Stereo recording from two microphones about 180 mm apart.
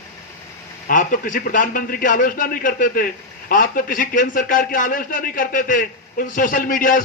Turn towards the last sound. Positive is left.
turn(degrees=50)  # may be behind; listen again after turning